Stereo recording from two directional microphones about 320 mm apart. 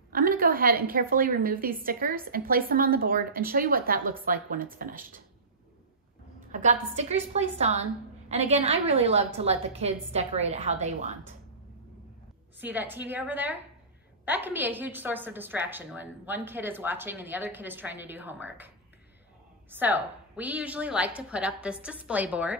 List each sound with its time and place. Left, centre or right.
0.1 s a woman's voice: right
6.5 s a woman's voice: right
12.5 s a woman's voice: centre
19.7 s a woman's voice: centre